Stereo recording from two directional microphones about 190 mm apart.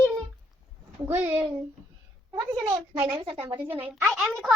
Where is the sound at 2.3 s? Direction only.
15° right (ahead or behind).